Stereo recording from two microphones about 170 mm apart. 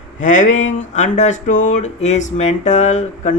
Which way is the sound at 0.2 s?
50° left (ahead or behind).